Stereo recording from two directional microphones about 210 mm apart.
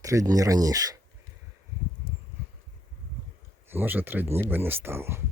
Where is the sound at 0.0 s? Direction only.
15° right (ahead or behind).